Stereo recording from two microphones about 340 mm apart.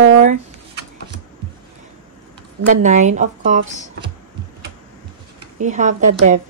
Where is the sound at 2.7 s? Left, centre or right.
Right.